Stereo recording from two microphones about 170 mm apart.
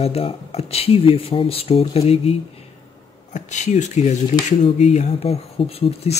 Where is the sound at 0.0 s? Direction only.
35° left (ahead or behind).